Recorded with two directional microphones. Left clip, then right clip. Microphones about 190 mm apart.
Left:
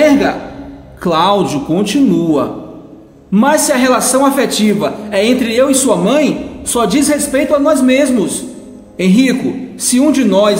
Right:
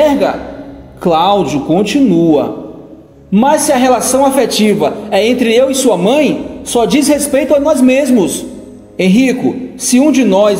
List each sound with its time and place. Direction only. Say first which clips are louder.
1.0 s a man's voice: right 2 dB; 5° right (ahead or behind)
6.0 s a man's voice: right 2 dB; 25° right (ahead or behind)